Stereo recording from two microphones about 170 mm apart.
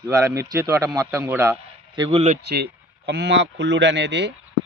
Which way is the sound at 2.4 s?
75° right (ahead or behind).